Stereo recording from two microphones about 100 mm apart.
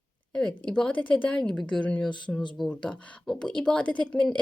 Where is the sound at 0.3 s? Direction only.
10° left (ahead or behind).